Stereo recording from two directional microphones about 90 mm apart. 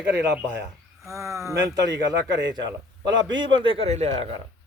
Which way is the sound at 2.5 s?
50° right (ahead or behind).